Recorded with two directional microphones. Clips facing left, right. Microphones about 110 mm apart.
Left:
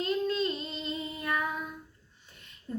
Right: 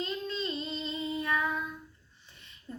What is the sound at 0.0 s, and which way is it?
Humming, 50° left (ahead or behind).